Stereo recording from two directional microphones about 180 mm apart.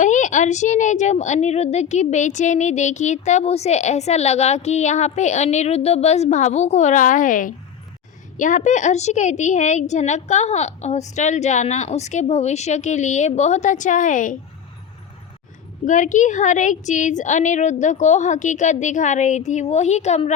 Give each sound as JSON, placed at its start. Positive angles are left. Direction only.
{"t": 0.0, "sound": "a woman's voice", "side_deg": 45}
{"t": 15.8, "sound": "a woman's voice", "side_deg": 45}